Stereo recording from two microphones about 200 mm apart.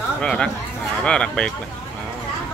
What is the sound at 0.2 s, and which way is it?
Speech, 5° left (ahead or behind).